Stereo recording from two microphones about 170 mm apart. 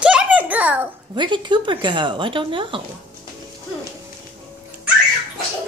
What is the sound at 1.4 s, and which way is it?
A woman's voice, 30° right (ahead or behind).